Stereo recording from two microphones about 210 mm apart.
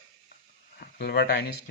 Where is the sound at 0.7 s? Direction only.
50° left (ahead or behind).